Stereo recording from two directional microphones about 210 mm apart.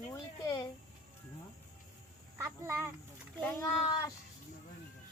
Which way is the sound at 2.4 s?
10° right (ahead or behind).